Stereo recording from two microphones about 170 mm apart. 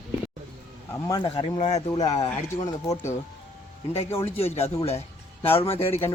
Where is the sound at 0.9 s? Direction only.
20° left (ahead or behind).